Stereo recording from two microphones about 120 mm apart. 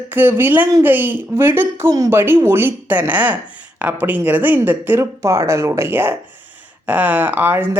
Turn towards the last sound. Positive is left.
turn(degrees=-15)  # may be behind; listen again after turning